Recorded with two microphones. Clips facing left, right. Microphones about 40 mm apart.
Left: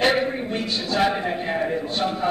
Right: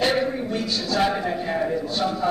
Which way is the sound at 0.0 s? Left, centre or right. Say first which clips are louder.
Left 1 dB; left.